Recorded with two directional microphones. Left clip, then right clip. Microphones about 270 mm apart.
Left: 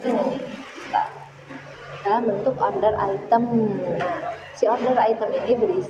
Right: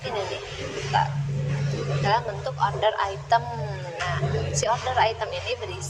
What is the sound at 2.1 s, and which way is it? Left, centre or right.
A woman's voice, right.